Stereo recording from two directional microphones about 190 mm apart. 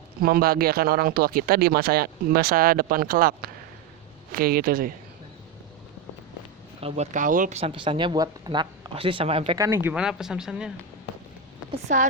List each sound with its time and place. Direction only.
0.2 s speech: 50° right (ahead or behind)
6.8 s speech: 35° right (ahead or behind)
7.6 s speech: 25° right (ahead or behind)
9.6 s speech: 15° right (ahead or behind)
11.7 s speech: 40° right (ahead or behind)